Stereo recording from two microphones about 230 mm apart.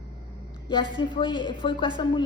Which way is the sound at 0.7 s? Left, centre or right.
Left.